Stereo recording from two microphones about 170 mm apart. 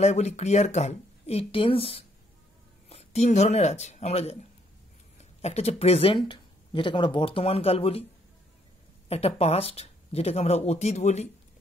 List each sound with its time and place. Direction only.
0.0 s speech: 40° left (ahead or behind)
5.4 s speech: 40° left (ahead or behind)
9.1 s speech: 35° left (ahead or behind)